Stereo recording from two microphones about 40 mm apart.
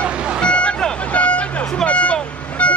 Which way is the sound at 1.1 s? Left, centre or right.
Left.